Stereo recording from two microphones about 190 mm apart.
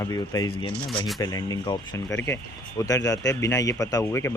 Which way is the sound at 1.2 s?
20° left (ahead or behind).